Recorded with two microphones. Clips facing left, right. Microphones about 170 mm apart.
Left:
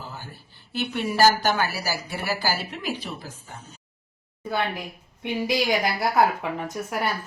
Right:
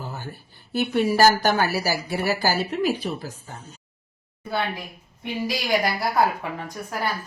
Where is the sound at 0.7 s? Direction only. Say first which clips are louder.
Right 6 dB; 40° right (ahead or behind).